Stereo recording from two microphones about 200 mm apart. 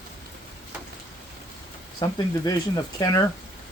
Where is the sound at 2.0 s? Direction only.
20° left (ahead or behind).